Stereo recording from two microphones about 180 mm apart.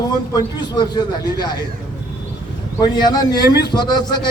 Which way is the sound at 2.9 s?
20° left (ahead or behind).